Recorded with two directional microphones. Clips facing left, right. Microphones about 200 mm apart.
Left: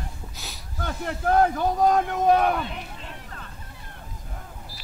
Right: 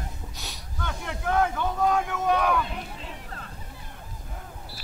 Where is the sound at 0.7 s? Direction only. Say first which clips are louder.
Left 4 dB; 40° left (ahead or behind).